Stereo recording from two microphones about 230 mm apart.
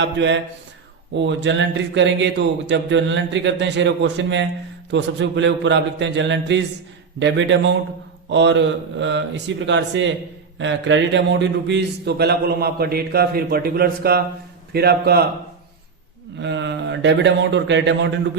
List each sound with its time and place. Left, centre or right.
0.0 s a man's voice: right
16.4 s a man's voice: right